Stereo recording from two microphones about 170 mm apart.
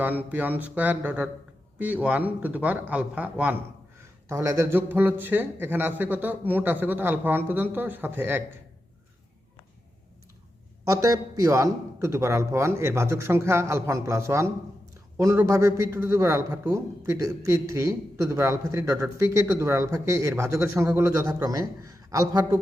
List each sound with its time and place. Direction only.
0.0 s a man's voice: 10° right (ahead or behind)
10.8 s a man's voice: 20° right (ahead or behind)